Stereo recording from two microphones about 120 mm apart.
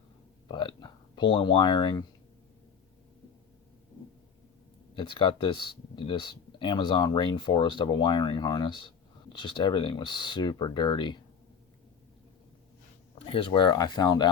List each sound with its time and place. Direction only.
0.4 s speech: 40° left (ahead or behind)
4.9 s speech: 45° left (ahead or behind)
13.1 s speech: 45° left (ahead or behind)